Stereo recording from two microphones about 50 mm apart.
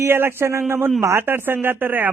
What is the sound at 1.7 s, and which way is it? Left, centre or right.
Speech, right.